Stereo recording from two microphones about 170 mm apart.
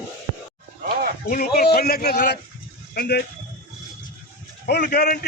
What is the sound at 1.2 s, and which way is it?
A man's voice, 60° left (ahead or behind).